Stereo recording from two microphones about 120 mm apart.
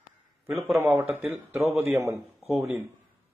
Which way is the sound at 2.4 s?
Centre (ahead or behind).